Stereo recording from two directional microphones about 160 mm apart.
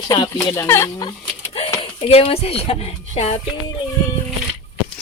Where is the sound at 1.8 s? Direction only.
35° left (ahead or behind).